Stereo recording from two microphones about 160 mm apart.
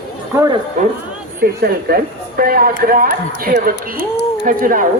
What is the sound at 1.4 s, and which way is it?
A woman's voice, 70° right (ahead or behind).